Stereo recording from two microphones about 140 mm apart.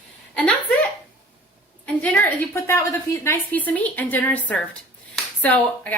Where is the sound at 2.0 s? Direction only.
15° left (ahead or behind).